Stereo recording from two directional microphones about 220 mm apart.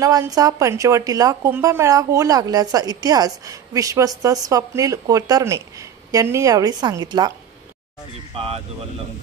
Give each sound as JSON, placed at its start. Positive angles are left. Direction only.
{"t": 0.0, "sound": "a woman's voice", "side_deg": -15}